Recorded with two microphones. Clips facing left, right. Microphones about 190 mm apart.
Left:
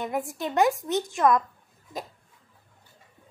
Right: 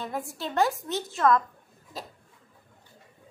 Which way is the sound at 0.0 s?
20° left (ahead or behind).